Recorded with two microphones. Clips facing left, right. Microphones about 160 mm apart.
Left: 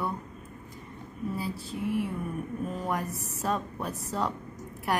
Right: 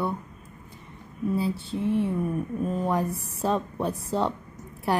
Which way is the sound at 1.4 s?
25° right (ahead or behind).